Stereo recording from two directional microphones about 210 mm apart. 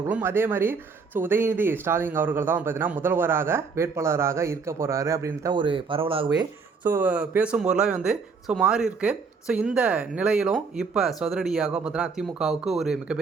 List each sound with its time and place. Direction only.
0.1 s speech: 10° right (ahead or behind)
7.0 s speech: 5° right (ahead or behind)